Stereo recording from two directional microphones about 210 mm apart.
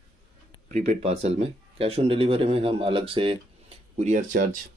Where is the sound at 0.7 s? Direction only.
30° right (ahead or behind).